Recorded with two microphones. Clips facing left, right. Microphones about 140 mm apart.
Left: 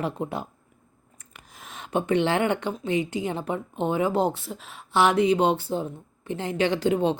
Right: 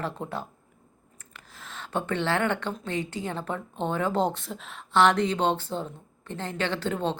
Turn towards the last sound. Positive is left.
turn(degrees=15)  # may be behind; listen again after turning